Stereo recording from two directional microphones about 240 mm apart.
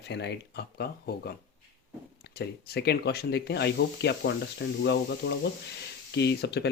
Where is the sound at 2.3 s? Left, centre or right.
Left.